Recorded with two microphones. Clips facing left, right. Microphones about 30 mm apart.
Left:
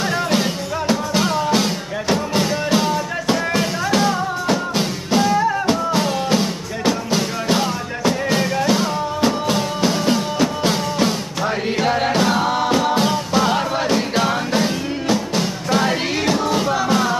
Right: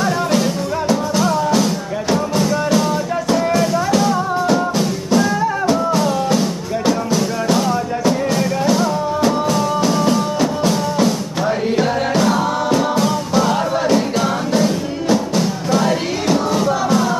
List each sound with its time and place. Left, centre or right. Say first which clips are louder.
0.0 s music: right 2 dB; left
7.1 s music: right 2 dB; left
15.7 s music: right 1 dB; centre